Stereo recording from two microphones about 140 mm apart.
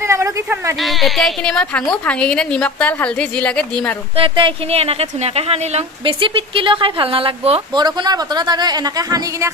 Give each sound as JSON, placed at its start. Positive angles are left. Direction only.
{"t": 0.0, "sound": "a sound", "side_deg": -20}
{"t": 0.7, "sound": "a woman's voice", "side_deg": 0}
{"t": 4.2, "sound": "speech", "side_deg": -40}
{"t": 7.7, "sound": "speech", "side_deg": -30}